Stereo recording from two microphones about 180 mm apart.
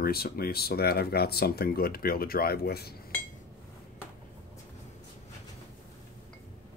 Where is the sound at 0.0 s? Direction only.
60° left (ahead or behind).